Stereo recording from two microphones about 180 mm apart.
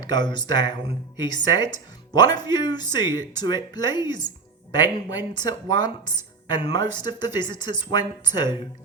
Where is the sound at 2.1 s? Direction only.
25° left (ahead or behind).